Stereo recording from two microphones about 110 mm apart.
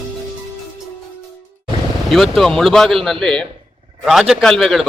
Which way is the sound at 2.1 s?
Centre (ahead or behind).